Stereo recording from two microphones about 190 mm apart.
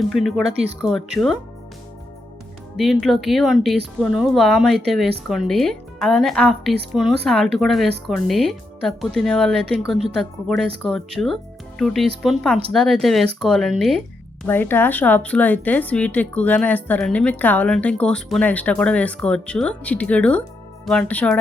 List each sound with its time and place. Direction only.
0.1 s speech: centre (ahead or behind)
2.7 s speech: centre (ahead or behind)
14.4 s a woman's voice: 10° left (ahead or behind)